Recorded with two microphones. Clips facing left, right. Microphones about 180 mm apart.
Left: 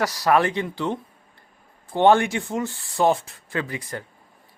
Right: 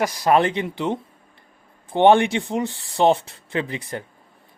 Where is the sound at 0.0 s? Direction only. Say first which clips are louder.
Right 2 dB; 20° right (ahead or behind).